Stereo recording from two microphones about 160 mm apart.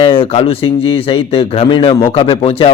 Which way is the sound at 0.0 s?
35° left (ahead or behind).